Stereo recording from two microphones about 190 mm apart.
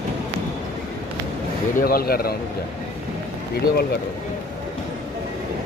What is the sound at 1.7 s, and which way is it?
Speech, 50° left (ahead or behind).